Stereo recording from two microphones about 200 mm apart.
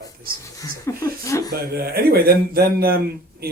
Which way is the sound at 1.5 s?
50° right (ahead or behind).